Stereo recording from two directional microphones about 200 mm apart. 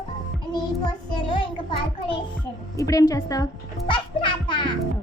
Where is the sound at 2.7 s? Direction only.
15° left (ahead or behind).